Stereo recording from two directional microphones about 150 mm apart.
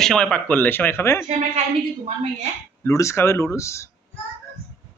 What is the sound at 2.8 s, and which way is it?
Speech, 20° left (ahead or behind).